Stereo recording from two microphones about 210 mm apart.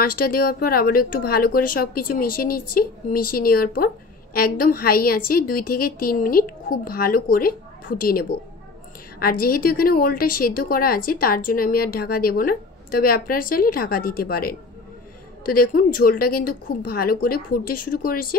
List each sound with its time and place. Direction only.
0.0 s speech: 45° left (ahead or behind)